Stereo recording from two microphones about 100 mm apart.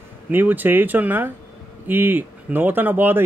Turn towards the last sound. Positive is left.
turn(degrees=-20)  # may be behind; listen again after turning